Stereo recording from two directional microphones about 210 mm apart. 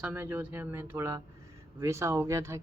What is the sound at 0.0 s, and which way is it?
Speech, 10° right (ahead or behind).